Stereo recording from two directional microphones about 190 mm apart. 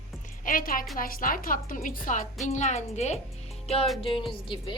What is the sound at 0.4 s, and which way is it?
A woman's voice, 45° left (ahead or behind).